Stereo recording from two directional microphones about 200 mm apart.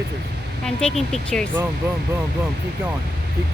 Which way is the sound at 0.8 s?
5° left (ahead or behind).